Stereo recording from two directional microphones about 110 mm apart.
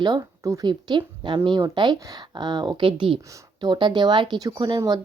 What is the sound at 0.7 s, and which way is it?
Speech, 45° right (ahead or behind).